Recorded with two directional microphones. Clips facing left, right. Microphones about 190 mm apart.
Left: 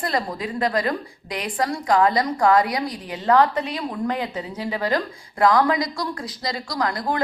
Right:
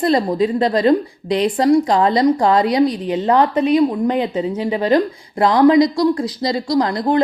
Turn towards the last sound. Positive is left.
turn(degrees=-25)  # may be behind; listen again after turning